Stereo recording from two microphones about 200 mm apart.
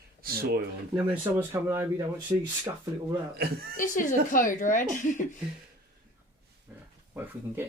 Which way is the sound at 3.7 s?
40° left (ahead or behind).